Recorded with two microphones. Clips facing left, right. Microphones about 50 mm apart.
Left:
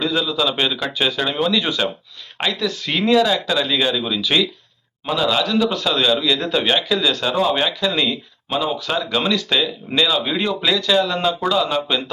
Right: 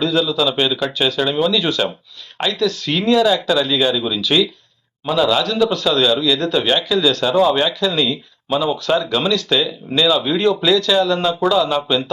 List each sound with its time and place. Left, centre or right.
0.0 s speech: centre
3.1 s a man's voice: centre
8.4 s speech: centre